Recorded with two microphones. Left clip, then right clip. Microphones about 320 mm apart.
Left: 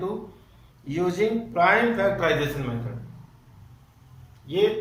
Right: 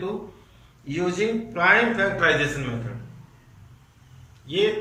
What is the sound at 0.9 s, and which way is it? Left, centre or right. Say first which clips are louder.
A man's voice: even; left.